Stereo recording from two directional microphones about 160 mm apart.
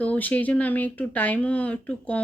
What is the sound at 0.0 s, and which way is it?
Speech, 10° left (ahead or behind).